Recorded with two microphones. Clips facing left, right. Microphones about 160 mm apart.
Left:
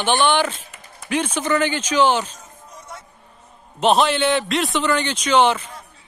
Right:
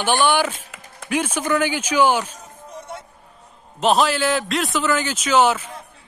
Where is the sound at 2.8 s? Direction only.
60° right (ahead or behind).